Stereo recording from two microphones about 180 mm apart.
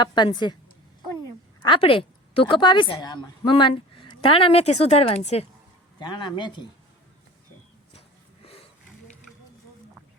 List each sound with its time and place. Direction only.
0.0 s speech: 25° left (ahead or behind)
6.0 s speech: 25° left (ahead or behind)